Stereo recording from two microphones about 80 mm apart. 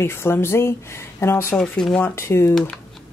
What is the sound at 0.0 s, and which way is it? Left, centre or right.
Speech, left.